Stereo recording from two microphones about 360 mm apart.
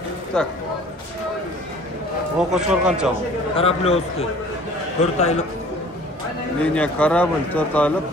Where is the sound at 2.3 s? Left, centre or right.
Centre.